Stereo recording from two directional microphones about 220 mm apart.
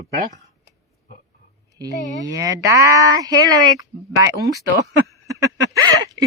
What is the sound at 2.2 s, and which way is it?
Speech, 15° right (ahead or behind).